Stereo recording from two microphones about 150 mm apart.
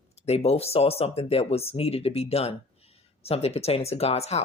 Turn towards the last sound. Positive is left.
turn(degrees=45)  # may be behind; listen again after turning